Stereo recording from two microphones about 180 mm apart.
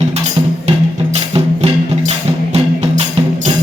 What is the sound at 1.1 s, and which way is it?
Music, 35° right (ahead or behind).